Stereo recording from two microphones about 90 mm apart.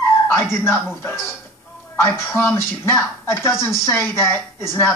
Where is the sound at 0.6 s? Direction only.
25° left (ahead or behind).